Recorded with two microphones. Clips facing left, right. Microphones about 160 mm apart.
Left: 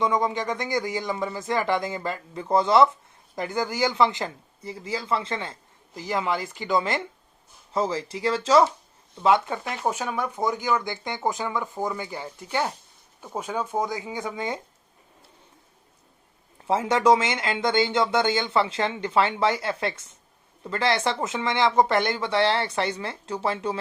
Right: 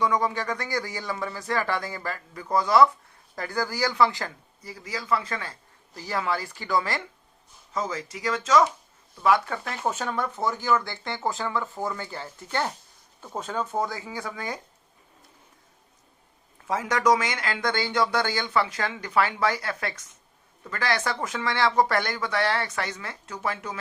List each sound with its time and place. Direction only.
0.0 s speech: 20° left (ahead or behind)
16.6 s speech: 25° left (ahead or behind)